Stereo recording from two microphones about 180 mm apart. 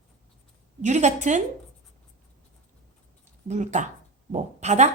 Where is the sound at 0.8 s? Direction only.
40° right (ahead or behind).